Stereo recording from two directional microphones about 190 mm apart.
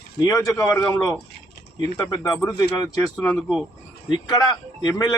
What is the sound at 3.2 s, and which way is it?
Speech, centre (ahead or behind).